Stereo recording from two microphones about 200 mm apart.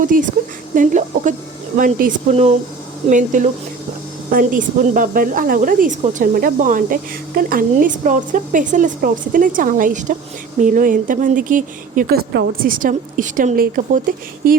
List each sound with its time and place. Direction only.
0.0 s speech: 40° right (ahead or behind)